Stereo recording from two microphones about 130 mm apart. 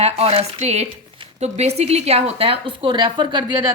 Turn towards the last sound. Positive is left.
turn(degrees=-35)  # may be behind; listen again after turning